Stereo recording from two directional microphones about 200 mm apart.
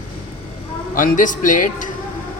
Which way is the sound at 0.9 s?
40° left (ahead or behind).